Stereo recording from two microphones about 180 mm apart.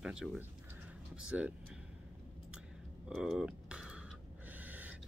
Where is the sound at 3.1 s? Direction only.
Centre (ahead or behind).